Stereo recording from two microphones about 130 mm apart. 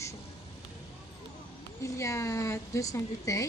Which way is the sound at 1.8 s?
25° left (ahead or behind).